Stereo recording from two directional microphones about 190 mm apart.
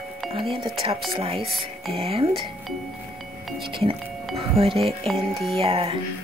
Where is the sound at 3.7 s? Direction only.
30° right (ahead or behind).